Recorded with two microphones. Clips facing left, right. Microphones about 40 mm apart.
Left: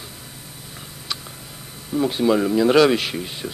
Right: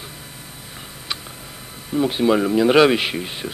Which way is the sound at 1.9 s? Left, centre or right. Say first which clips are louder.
Right 1 dB; centre.